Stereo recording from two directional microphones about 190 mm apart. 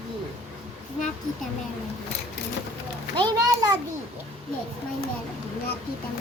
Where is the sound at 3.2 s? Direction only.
20° right (ahead or behind).